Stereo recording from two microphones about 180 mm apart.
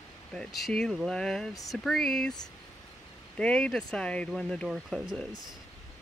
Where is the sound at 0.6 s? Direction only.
Centre (ahead or behind).